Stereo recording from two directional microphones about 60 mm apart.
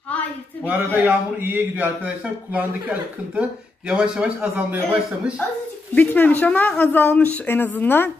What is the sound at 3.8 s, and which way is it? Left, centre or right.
Speech, centre.